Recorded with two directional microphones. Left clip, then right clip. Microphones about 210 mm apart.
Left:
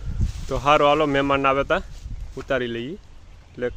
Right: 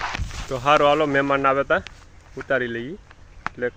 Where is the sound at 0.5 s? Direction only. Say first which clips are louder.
Even; 10° left (ahead or behind).